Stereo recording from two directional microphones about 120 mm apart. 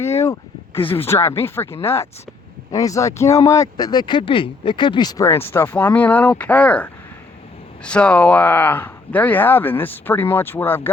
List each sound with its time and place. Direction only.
0.0 s a sound: 20° left (ahead or behind)
0.8 s speech: 50° left (ahead or behind)
1.0 s speech: 20° left (ahead or behind)